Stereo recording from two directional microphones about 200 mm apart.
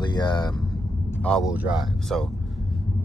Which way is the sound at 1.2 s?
Centre (ahead or behind).